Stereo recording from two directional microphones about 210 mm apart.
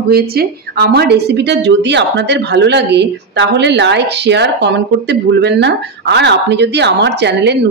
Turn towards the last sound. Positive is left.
turn(degrees=-55)  # may be behind; listen again after turning